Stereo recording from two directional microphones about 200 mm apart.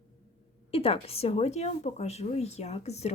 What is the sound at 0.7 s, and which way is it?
A woman's voice, 30° left (ahead or behind).